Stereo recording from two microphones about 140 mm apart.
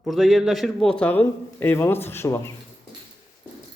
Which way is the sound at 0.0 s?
Centre (ahead or behind).